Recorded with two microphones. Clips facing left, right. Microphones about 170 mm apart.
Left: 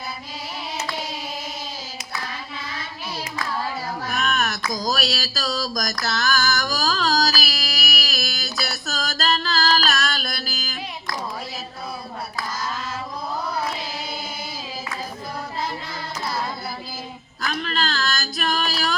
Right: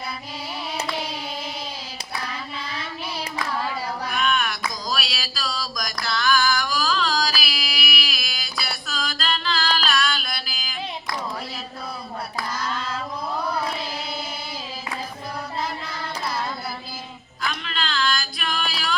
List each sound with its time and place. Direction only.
4.0 s a sound: 45° left (ahead or behind)
4.7 s music: 45° left (ahead or behind)
17.4 s female singing: 45° left (ahead or behind)